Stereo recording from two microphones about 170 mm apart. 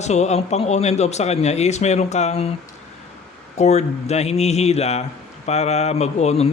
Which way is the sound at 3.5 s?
40° left (ahead or behind).